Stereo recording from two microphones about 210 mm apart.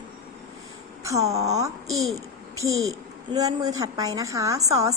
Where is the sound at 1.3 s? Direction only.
15° right (ahead or behind).